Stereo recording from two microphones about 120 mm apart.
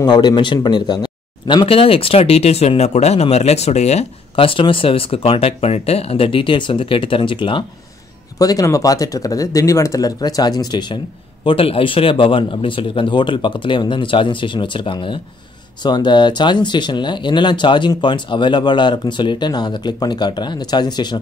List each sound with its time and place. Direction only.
0.0 s speech: 35° left (ahead or behind)
8.4 s speech: 30° left (ahead or behind)
11.4 s speech: 50° left (ahead or behind)